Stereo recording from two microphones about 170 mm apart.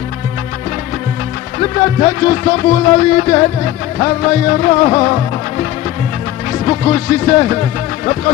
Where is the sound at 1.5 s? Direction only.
35° left (ahead or behind).